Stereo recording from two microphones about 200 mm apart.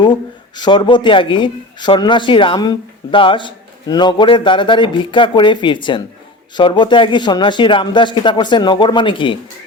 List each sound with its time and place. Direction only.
0.5 s speech: 20° left (ahead or behind)